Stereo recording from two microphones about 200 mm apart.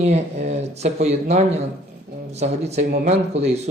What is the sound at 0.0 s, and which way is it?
Speech, 30° right (ahead or behind).